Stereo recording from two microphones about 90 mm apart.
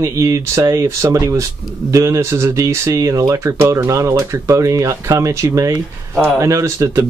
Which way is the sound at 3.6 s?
25° right (ahead or behind).